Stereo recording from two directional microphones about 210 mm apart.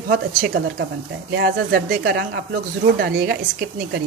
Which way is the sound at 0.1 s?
45° right (ahead or behind).